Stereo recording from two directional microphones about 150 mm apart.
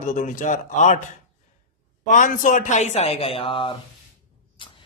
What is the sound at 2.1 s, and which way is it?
Speech, 60° left (ahead or behind).